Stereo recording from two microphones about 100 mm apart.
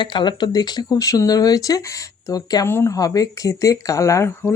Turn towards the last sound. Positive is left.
turn(degrees=30)  # may be behind; listen again after turning